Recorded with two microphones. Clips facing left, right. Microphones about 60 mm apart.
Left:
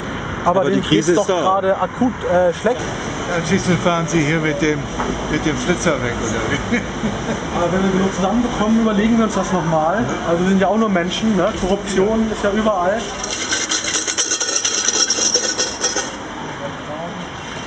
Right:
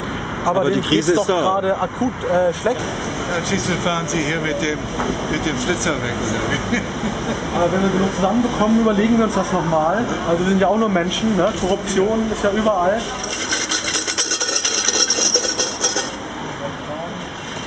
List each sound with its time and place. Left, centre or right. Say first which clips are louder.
0.5 s speech: left 2 dB; centre
4.1 s speech: left 3 dB; left
4.9 s speech: left 1 dB; centre